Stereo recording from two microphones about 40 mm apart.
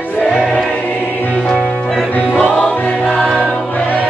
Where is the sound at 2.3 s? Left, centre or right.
Left.